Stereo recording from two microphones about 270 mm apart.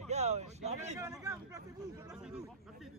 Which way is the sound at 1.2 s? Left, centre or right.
Centre.